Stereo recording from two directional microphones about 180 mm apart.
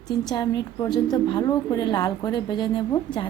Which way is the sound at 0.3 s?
20° left (ahead or behind).